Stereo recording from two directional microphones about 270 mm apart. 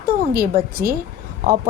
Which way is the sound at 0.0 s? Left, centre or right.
Right.